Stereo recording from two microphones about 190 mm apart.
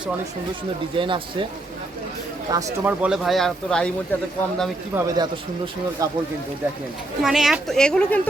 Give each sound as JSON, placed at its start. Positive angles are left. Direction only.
{"t": 0.9, "sound": "speech", "side_deg": -25}
{"t": 2.5, "sound": "speech", "side_deg": -15}
{"t": 4.9, "sound": "speech", "side_deg": -20}
{"t": 7.2, "sound": "speech", "side_deg": 0}